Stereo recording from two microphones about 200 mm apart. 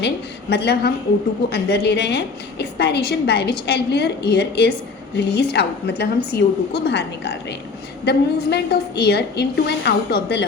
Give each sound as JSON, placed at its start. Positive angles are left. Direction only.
{"t": 0.5, "sound": "a woman's voice", "side_deg": 55}